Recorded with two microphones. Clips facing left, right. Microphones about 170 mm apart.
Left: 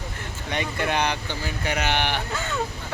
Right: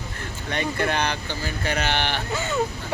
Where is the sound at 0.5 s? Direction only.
15° left (ahead or behind).